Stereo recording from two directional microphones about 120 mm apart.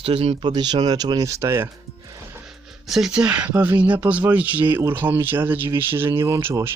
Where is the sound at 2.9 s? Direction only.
5° right (ahead or behind).